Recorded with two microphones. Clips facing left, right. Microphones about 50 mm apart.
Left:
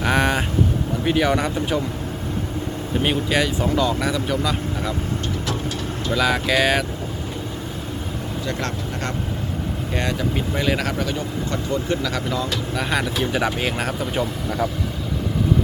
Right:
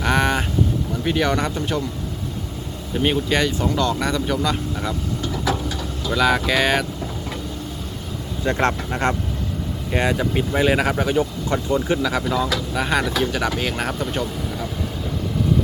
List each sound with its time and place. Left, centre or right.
0.0 s vehicle: centre
1.0 s speech: centre
2.9 s speech: centre
6.1 s speech: centre
8.4 s speech: right
9.9 s speech: centre
12.0 s speech: centre